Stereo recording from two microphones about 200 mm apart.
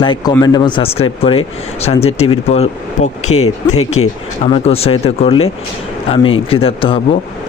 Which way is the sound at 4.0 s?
90° left.